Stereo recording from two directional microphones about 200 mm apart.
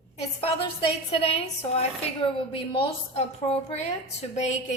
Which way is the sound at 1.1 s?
30° left (ahead or behind).